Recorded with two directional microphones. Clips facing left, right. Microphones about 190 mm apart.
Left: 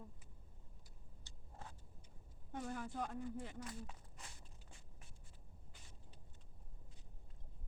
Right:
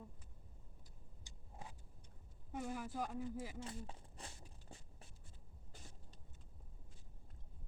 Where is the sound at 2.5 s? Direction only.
5° right (ahead or behind).